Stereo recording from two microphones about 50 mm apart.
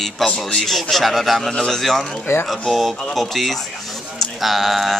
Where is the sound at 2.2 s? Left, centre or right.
Left.